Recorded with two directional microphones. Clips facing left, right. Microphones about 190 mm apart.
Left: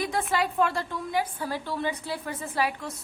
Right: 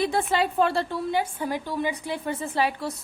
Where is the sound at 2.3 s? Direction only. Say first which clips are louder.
Right 3 dB; 30° right (ahead or behind).